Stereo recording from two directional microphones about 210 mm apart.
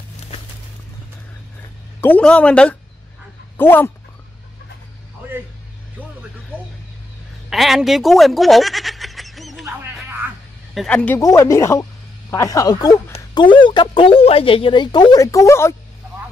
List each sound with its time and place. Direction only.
2.0 s speech: 10° left (ahead or behind)
7.4 s speech: centre (ahead or behind)
10.7 s speech: 5° left (ahead or behind)